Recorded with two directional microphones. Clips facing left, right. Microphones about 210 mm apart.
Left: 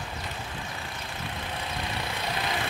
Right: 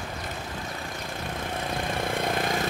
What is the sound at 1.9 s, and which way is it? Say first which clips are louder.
Vehicle: right 8 dB; 50° right (ahead or behind).